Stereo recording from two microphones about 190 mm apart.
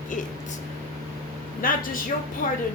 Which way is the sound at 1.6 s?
50° left (ahead or behind).